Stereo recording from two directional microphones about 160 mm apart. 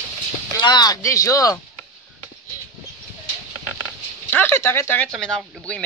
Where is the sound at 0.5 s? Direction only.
25° left (ahead or behind).